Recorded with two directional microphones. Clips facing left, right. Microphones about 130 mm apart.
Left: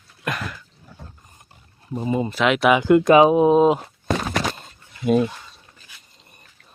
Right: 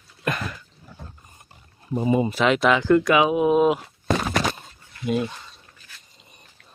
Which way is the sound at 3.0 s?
35° left (ahead or behind).